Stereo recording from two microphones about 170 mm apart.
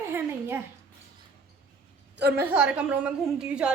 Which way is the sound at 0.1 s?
10° right (ahead or behind).